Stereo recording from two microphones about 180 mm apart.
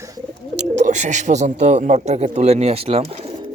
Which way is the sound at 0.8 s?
40° right (ahead or behind).